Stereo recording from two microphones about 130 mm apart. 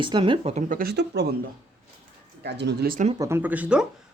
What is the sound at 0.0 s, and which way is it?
Speech, 40° right (ahead or behind).